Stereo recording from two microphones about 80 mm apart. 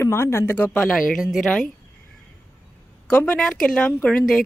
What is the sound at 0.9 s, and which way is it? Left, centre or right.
Speech, centre.